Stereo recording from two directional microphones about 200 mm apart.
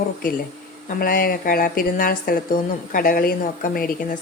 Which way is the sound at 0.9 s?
45° left (ahead or behind).